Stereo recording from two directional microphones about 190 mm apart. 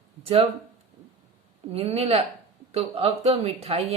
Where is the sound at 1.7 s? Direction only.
30° right (ahead or behind).